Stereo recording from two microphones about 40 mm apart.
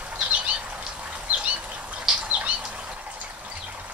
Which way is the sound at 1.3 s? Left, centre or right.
Right.